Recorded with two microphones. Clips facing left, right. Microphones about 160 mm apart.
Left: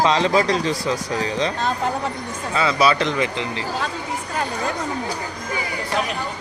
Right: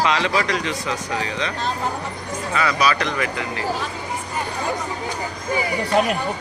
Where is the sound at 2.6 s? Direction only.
25° left (ahead or behind).